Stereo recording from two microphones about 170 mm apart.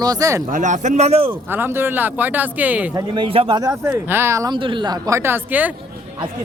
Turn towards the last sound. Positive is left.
turn(degrees=-10)  # may be behind; listen again after turning